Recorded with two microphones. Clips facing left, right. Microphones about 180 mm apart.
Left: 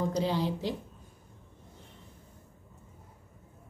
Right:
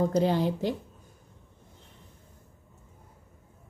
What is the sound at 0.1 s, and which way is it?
Speech, 50° right (ahead or behind).